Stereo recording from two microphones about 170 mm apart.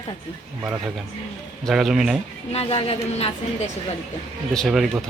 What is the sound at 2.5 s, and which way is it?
A woman's voice, 35° left (ahead or behind).